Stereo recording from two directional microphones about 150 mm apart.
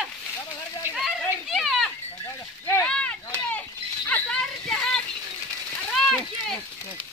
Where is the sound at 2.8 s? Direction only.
5° left (ahead or behind).